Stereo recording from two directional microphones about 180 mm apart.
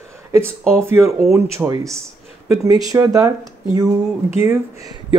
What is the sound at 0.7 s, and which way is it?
Speech, 15° right (ahead or behind).